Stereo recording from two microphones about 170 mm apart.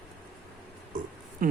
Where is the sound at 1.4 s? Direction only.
55° right (ahead or behind).